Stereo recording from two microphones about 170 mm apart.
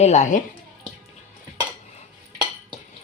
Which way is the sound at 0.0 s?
40° left (ahead or behind).